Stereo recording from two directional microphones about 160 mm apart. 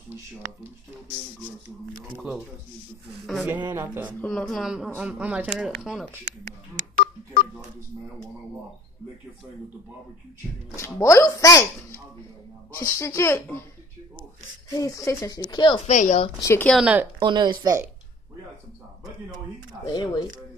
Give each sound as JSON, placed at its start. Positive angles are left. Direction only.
{"t": 3.3, "sound": "speech", "side_deg": -5}
{"t": 4.2, "sound": "speech", "side_deg": 5}
{"t": 10.8, "sound": "speech", "side_deg": 20}
{"t": 12.7, "sound": "speech", "side_deg": 20}
{"t": 14.7, "sound": "speech", "side_deg": 20}
{"t": 15.9, "sound": "a woman's voice", "side_deg": 50}
{"t": 16.4, "sound": "speech", "side_deg": 10}
{"t": 16.7, "sound": "speech", "side_deg": -10}
{"t": 17.2, "sound": "speech", "side_deg": -30}
{"t": 19.9, "sound": "speech", "side_deg": 30}